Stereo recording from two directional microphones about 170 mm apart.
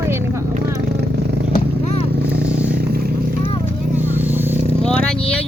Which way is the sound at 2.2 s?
80° right.